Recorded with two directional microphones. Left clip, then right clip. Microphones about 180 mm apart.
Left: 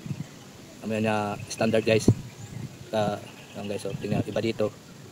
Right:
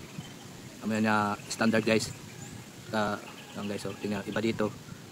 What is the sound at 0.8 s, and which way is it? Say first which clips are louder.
Speech: left 1 dB; 30° right (ahead or behind).